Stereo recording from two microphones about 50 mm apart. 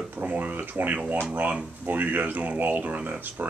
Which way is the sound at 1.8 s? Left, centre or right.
Right.